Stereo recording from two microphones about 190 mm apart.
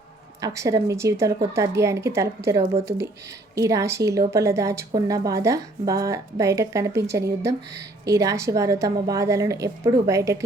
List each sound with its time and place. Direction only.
0.4 s a woman's voice: 15° right (ahead or behind)